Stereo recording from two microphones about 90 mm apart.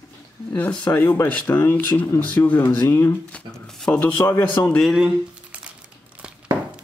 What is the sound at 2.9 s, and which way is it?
Speech, 30° left (ahead or behind).